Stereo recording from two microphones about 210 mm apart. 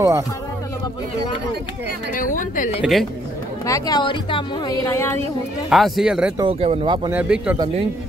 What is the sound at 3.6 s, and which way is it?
A woman's voice, 15° left (ahead or behind).